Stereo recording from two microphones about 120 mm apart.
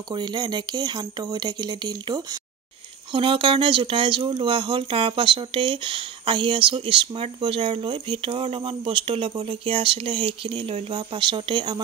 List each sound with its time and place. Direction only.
0.1 s speech: 40° right (ahead or behind)
3.1 s speech: 45° right (ahead or behind)